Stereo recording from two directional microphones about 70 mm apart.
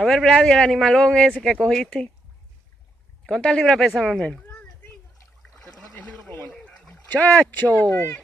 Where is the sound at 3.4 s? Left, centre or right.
Centre.